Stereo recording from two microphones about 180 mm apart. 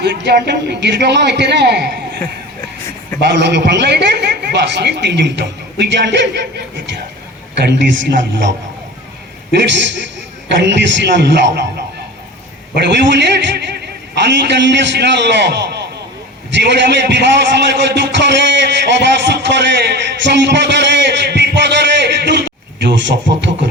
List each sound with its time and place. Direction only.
0.0 s a man's voice: 65° right (ahead or behind)
3.2 s a man's voice: 70° right (ahead or behind)
7.5 s a man's voice: 75° right (ahead or behind)
10.6 s a man's voice: 75° right (ahead or behind)
12.7 s a man's voice: 70° right (ahead or behind)